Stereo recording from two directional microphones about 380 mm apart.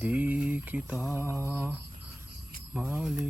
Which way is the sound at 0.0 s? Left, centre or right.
Centre.